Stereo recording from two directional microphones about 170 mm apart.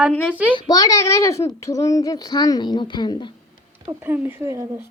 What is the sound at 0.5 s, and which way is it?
Speech, 20° left (ahead or behind).